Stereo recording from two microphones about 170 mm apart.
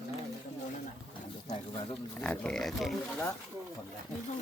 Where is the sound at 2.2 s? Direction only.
5° left (ahead or behind).